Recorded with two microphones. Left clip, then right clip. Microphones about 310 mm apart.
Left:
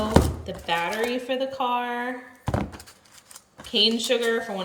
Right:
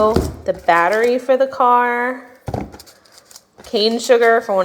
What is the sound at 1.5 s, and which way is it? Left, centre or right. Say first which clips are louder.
Speech: right 12 dB; right.